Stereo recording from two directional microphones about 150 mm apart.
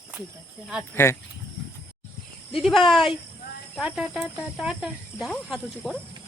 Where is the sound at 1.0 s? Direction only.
15° left (ahead or behind).